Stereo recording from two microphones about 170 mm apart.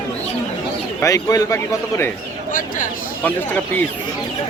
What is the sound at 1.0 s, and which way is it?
Speech, 20° left (ahead or behind).